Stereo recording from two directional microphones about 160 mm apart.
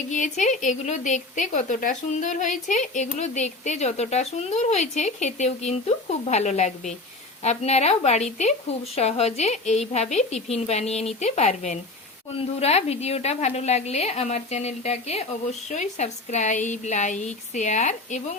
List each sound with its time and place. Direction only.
0.1 s a woman's voice: 50° left (ahead or behind)